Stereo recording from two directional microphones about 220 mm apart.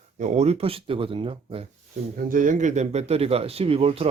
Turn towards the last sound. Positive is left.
turn(degrees=-25)  # may be behind; listen again after turning